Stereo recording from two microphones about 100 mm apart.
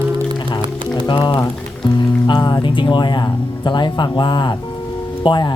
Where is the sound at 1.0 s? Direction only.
55° left (ahead or behind).